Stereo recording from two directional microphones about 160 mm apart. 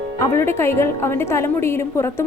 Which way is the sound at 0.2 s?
15° left (ahead or behind).